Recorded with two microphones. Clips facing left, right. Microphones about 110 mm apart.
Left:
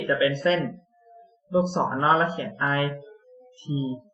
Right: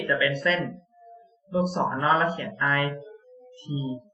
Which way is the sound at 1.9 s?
30° left (ahead or behind).